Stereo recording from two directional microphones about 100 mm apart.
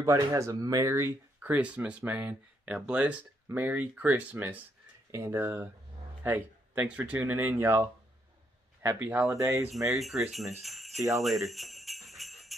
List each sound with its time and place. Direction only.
0.0 s speech: 30° right (ahead or behind)
1.4 s speech: 15° right (ahead or behind)
5.1 s speech: 30° right (ahead or behind)
5.4 s speech: 20° right (ahead or behind)
9.8 s speech: centre (ahead or behind)
10.6 s jingle bell: centre (ahead or behind)